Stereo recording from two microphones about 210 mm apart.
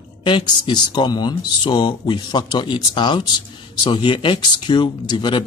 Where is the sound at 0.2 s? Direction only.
25° left (ahead or behind).